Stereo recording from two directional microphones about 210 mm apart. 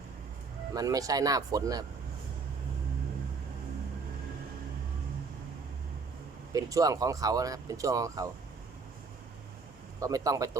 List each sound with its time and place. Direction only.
0.7 s speech: 15° right (ahead or behind)
6.5 s speech: 15° right (ahead or behind)
10.0 s speech: 15° right (ahead or behind)